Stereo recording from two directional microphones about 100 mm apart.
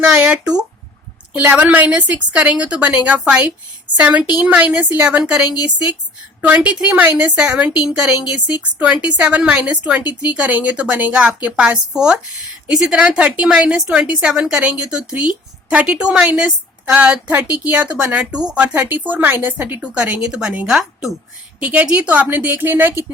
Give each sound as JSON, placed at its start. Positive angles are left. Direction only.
{"t": 0.1, "sound": "a sound", "side_deg": -10}
{"t": 1.3, "sound": "a woman's voice", "side_deg": -15}
{"t": 6.4, "sound": "a woman's voice", "side_deg": -15}